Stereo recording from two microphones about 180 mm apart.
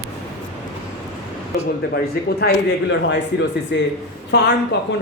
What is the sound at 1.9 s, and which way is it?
Speech, 60° left (ahead or behind).